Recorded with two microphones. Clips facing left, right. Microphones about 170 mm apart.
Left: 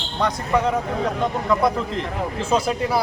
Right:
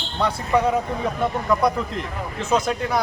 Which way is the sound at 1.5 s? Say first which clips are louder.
Left 1 dB; centre (ahead or behind).